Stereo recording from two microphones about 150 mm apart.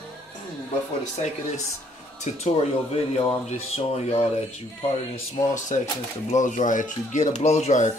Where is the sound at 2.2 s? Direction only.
50° left (ahead or behind).